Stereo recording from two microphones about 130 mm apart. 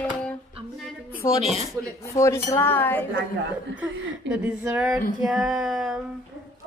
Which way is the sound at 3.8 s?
10° right (ahead or behind).